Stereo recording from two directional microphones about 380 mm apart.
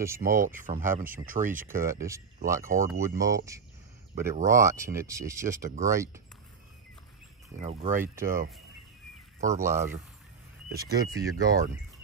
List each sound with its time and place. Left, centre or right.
0.0 s speech: centre
0.3 s speech: right
1.9 s speech: centre
2.6 s speech: right
2.9 s speech: centre
7.6 s speech: centre
9.4 s speech: centre